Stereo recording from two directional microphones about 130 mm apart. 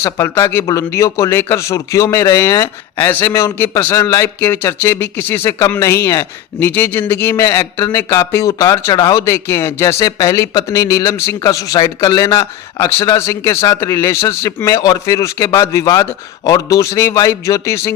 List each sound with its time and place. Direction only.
0.0 s a man's voice: 20° left (ahead or behind)
6.6 s a man's voice: 15° left (ahead or behind)